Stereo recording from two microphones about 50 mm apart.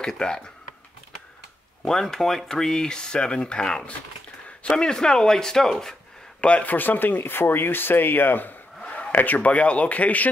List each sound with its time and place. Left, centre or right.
0.0 s speech: centre
1.9 s speech: centre
6.4 s a man's voice: left
6.7 s speech: left
8.8 s speech: left